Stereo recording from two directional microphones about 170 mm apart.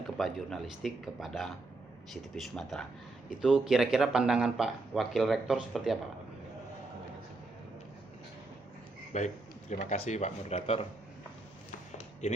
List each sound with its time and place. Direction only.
0.2 s speech: centre (ahead or behind)
9.1 s speech: 45° left (ahead or behind)